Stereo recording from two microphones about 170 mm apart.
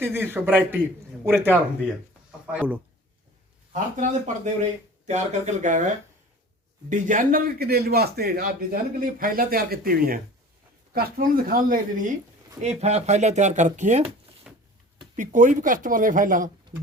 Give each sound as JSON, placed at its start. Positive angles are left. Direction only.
{"t": 0.0, "sound": "a man's voice", "side_deg": -15}
{"t": 3.7, "sound": "speech", "side_deg": -45}
{"t": 6.9, "sound": "speech", "side_deg": -50}
{"t": 12.6, "sound": "speech", "side_deg": -40}
{"t": 14.5, "sound": "a sound", "side_deg": -5}
{"t": 15.1, "sound": "speech", "side_deg": -50}